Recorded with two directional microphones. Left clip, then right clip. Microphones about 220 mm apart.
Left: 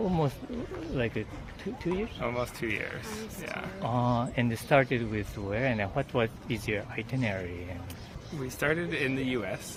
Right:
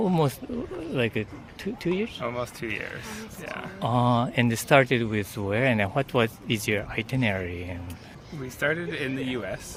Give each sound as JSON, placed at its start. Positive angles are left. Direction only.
{"t": 0.0, "sound": "speech", "side_deg": -50}
{"t": 2.2, "sound": "a man's voice", "side_deg": -15}
{"t": 3.8, "sound": "speech", "side_deg": -50}
{"t": 8.6, "sound": "a man's voice", "side_deg": -15}